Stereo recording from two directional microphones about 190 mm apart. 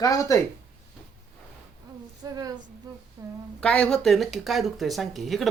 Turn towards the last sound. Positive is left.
turn(degrees=0)  # may be behind; listen again after turning